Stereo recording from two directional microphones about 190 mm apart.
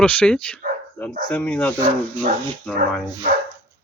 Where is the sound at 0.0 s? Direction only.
5° left (ahead or behind).